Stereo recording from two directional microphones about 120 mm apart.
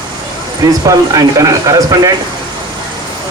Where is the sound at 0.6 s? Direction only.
30° right (ahead or behind).